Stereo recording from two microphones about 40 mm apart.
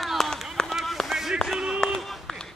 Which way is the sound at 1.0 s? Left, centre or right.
Centre.